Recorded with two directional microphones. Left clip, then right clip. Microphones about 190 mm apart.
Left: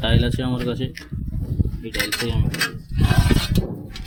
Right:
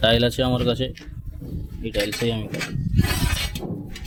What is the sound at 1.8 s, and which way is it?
Speech, 55° right (ahead or behind).